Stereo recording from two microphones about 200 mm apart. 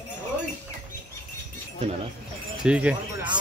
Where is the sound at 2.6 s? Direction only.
5° right (ahead or behind).